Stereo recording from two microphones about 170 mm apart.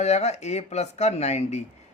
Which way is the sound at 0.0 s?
40° left (ahead or behind).